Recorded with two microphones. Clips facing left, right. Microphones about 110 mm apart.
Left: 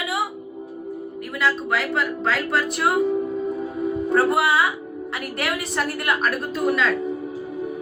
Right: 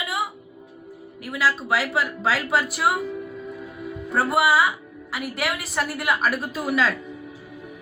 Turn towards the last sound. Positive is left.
turn(degrees=-5)  # may be behind; listen again after turning